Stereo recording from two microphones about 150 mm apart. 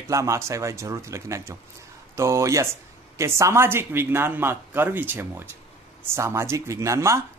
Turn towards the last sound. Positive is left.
turn(degrees=-20)  # may be behind; listen again after turning